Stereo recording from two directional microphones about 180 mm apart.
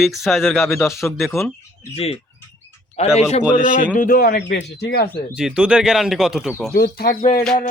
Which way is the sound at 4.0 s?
55° left (ahead or behind).